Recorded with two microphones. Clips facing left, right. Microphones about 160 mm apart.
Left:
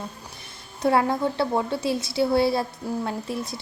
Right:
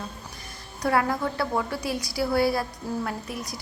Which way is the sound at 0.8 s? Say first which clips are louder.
Left 3 dB; 25° left (ahead or behind).